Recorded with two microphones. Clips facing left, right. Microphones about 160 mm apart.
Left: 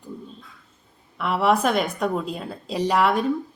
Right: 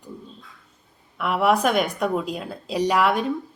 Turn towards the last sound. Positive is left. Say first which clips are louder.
# even
turn(degrees=0)  # may be behind; listen again after turning